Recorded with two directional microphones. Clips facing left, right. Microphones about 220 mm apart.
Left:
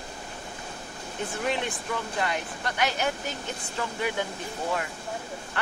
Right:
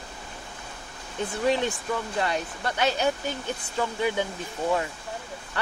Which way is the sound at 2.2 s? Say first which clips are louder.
Right 2 dB; 30° right (ahead or behind).